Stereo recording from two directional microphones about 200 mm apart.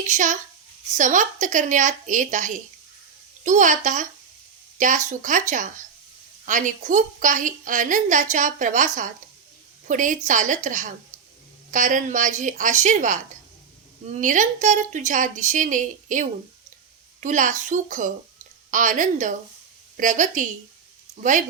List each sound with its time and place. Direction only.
0.1 s a woman's voice: 40° right (ahead or behind)